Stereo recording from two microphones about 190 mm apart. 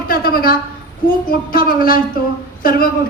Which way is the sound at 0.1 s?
50° left (ahead or behind).